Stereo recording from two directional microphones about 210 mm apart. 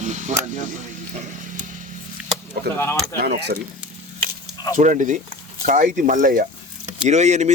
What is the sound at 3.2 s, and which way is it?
Speech, 50° right (ahead or behind).